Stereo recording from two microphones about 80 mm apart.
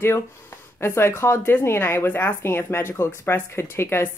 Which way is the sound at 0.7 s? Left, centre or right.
Left.